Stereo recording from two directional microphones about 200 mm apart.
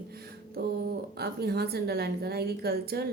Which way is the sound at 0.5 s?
55° right (ahead or behind).